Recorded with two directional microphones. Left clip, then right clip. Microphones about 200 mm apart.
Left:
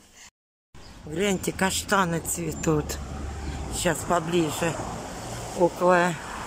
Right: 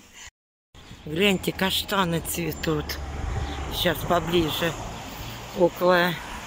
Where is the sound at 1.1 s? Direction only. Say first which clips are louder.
Right 4 dB; centre (ahead or behind).